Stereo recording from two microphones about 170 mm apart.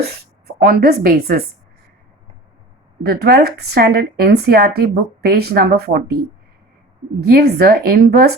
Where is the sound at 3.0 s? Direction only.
70° right (ahead or behind).